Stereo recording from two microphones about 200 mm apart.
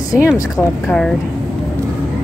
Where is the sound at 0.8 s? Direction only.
5° left (ahead or behind).